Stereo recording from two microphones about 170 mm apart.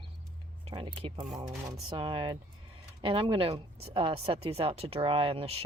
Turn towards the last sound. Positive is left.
turn(degrees=-35)  # may be behind; listen again after turning